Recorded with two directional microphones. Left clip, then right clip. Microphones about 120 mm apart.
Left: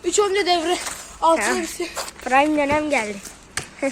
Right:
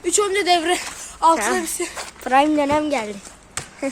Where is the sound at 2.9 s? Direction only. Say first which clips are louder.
Left 2 dB; 25° right (ahead or behind).